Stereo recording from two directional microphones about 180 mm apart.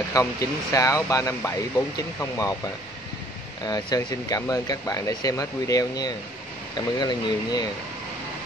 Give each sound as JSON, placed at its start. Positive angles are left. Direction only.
{"t": 0.1, "sound": "speech", "side_deg": 20}
{"t": 3.6, "sound": "speech", "side_deg": 20}